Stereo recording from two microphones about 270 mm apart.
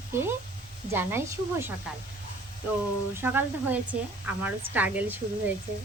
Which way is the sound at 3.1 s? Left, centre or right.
Centre.